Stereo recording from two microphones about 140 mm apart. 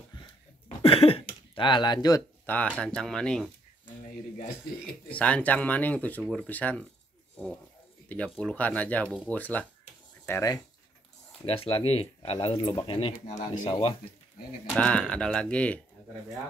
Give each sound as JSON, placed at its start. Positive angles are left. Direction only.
{"t": 0.8, "sound": "speech", "side_deg": 40}
{"t": 2.4, "sound": "speech", "side_deg": 10}
{"t": 5.1, "sound": "speech", "side_deg": 10}
{"t": 8.1, "sound": "speech", "side_deg": 10}
{"t": 11.4, "sound": "speech", "side_deg": 40}
{"t": 14.7, "sound": "speech", "side_deg": 10}